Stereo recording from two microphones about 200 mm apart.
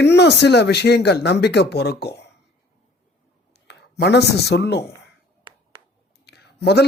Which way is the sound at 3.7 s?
60° left (ahead or behind).